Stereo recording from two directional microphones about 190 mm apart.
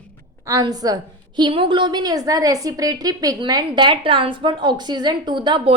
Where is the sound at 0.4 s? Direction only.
20° right (ahead or behind).